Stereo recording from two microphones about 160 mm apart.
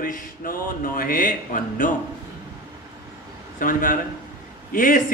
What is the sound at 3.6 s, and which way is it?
A man's voice, 60° left (ahead or behind).